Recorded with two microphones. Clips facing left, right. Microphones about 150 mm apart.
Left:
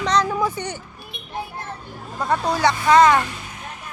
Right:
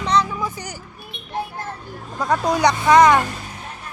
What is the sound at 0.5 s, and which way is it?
Speech, 30° left (ahead or behind).